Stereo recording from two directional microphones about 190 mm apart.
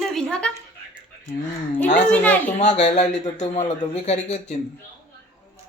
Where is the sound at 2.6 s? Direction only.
40° left (ahead or behind).